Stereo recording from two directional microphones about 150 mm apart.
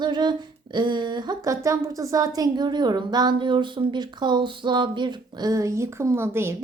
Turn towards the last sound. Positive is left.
turn(degrees=-15)  # may be behind; listen again after turning